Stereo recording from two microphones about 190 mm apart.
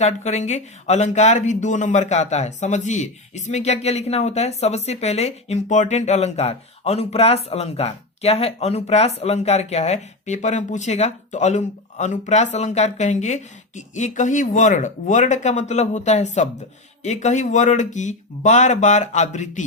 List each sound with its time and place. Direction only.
0.0 s speech: 35° left (ahead or behind)